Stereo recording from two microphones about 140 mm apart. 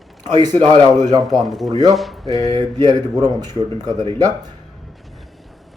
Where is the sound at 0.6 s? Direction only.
30° right (ahead or behind).